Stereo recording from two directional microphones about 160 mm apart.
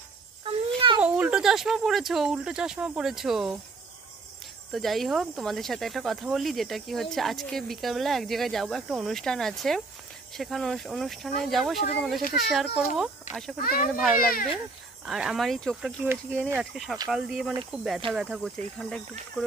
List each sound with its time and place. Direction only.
0.4 s a sound: 35° right (ahead or behind)
1.0 s speech: 5° right (ahead or behind)
4.7 s speech: centre (ahead or behind)
12.2 s a child's voice: 60° left (ahead or behind)
12.4 s speech: centre (ahead or behind)
13.6 s a child's voice: 70° left (ahead or behind)
15.0 s speech: centre (ahead or behind)
16.1 s speech: 15° right (ahead or behind)
16.7 s speech: centre (ahead or behind)